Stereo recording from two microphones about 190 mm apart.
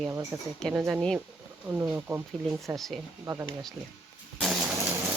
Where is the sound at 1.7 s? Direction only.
10° right (ahead or behind).